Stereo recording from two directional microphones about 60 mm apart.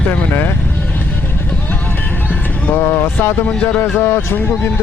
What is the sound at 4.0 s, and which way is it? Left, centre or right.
Speech, left.